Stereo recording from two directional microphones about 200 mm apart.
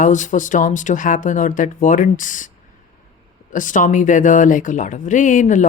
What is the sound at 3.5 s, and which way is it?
Speech, 40° left (ahead or behind).